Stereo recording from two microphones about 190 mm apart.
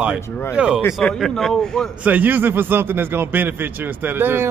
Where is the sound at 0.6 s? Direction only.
5° right (ahead or behind).